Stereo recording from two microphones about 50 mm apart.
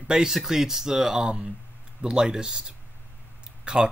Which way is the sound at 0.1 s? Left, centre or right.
Centre.